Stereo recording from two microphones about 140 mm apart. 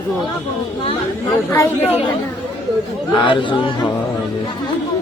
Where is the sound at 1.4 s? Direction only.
20° left (ahead or behind).